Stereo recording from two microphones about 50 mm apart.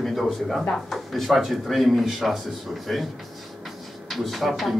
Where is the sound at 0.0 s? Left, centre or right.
Centre.